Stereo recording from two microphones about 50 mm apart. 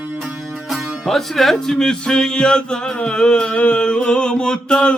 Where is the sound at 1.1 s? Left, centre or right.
Centre.